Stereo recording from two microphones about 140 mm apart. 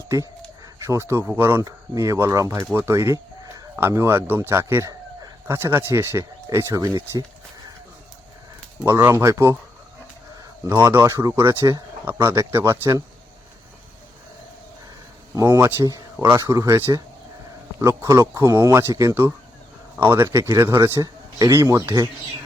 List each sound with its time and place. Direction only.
0.9 s a man's voice: 20° right (ahead or behind)
8.8 s a man's voice: 15° right (ahead or behind)
10.7 s speech: 20° right (ahead or behind)
15.4 s a man's voice: 25° right (ahead or behind)